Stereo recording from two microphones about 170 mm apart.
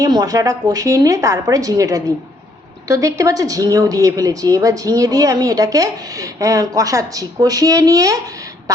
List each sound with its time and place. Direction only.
0.0 s a woman's voice: 20° right (ahead or behind)